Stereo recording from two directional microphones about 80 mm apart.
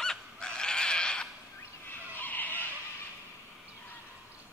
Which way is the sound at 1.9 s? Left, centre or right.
Left.